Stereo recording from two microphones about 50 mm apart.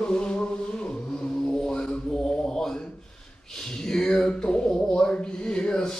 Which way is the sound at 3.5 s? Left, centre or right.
Centre.